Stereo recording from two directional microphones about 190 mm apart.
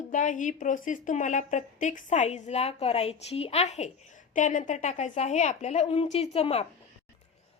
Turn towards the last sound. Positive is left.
turn(degrees=35)  # may be behind; listen again after turning